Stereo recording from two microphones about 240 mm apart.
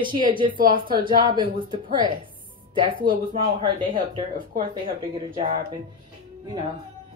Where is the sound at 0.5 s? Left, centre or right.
Right.